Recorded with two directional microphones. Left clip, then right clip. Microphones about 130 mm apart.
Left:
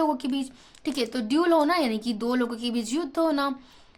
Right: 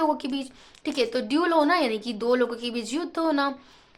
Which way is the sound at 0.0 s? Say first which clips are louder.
Right 1 dB; 35° left (ahead or behind).